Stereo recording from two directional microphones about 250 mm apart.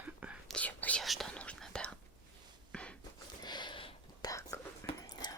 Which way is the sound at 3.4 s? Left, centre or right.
Centre.